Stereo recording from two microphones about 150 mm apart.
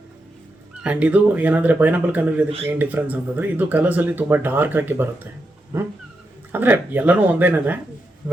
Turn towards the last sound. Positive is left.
turn(degrees=-10)  # may be behind; listen again after turning